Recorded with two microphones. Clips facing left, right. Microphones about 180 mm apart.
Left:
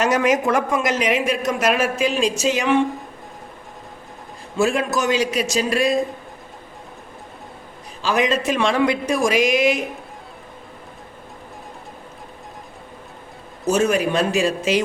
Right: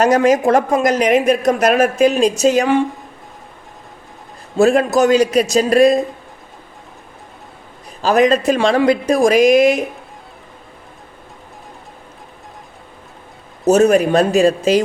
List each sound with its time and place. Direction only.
0.0 s speech: 35° right (ahead or behind)
4.5 s speech: 40° right (ahead or behind)
8.0 s speech: 40° right (ahead or behind)
13.7 s speech: 40° right (ahead or behind)